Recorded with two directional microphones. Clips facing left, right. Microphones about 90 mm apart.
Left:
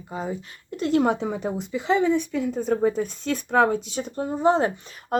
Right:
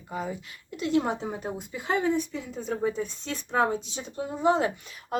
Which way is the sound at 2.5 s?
45° left (ahead or behind).